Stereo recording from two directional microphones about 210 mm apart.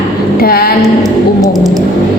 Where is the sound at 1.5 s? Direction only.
15° right (ahead or behind).